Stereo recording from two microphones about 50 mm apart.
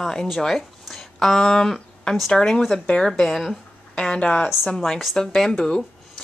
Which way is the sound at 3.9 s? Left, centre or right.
Centre.